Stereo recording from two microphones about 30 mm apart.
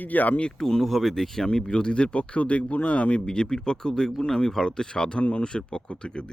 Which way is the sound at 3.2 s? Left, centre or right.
Left.